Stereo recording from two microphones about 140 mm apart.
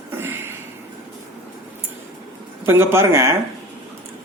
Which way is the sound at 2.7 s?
15° right (ahead or behind).